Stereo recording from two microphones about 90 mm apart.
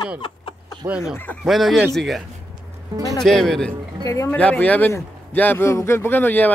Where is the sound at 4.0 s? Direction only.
35° left (ahead or behind).